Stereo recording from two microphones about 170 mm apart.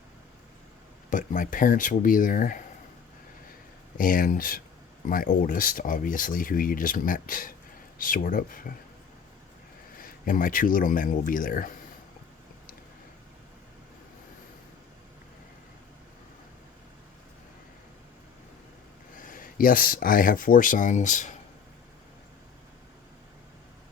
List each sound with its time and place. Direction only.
1.1 s speech: 50° left (ahead or behind)
3.9 s speech: 55° left (ahead or behind)
10.0 s speech: 55° left (ahead or behind)
19.1 s speech: 55° left (ahead or behind)